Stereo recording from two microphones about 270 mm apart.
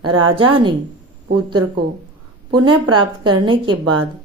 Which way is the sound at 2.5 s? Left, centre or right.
Centre.